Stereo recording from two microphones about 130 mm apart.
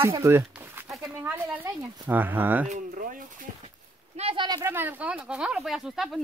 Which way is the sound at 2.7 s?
90° right.